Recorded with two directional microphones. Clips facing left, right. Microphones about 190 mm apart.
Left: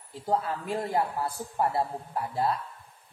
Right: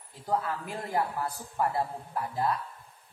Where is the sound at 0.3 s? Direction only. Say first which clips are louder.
Left 3 dB; 25° left (ahead or behind).